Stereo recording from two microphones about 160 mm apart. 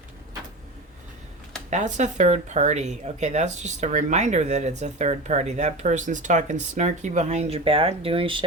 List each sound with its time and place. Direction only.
1.7 s speech: 45° right (ahead or behind)